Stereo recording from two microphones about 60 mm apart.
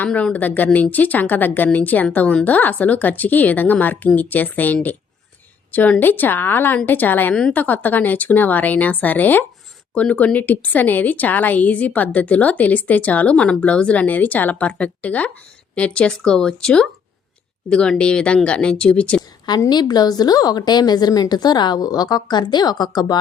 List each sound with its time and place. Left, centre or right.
0.1 s speech: centre
0.3 s a woman's voice: left
6.0 s a woman's voice: left
19.5 s a woman's voice: left